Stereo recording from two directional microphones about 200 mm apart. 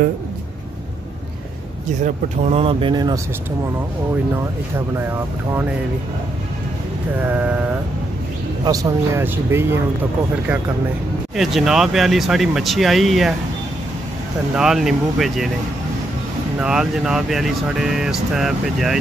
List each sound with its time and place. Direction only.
2.0 s speech: 30° right (ahead or behind)
7.2 s speech: 10° right (ahead or behind)
8.6 s speech: 15° right (ahead or behind)
11.3 s speech: centre (ahead or behind)
14.5 s speech: 5° right (ahead or behind)
16.5 s speech: 5° right (ahead or behind)